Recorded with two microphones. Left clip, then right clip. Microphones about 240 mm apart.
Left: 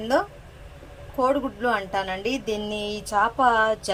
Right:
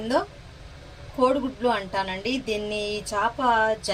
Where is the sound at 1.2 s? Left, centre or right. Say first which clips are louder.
Right 1 dB; left.